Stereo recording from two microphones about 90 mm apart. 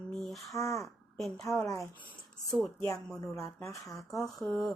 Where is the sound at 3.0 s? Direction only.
5° left (ahead or behind).